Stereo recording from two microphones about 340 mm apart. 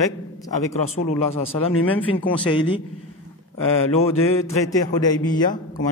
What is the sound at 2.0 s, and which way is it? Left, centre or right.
Speech, centre.